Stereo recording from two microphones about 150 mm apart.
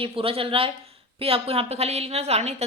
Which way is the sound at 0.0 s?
40° right (ahead or behind).